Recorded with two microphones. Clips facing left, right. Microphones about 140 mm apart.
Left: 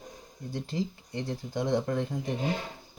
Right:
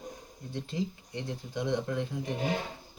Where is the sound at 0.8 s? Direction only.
45° left (ahead or behind).